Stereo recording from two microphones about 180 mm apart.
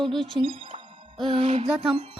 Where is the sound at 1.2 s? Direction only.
35° right (ahead or behind).